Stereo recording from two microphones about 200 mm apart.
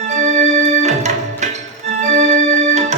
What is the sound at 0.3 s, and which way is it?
Music, 35° right (ahead or behind).